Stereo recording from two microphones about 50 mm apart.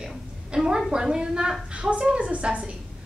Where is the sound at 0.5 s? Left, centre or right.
Centre.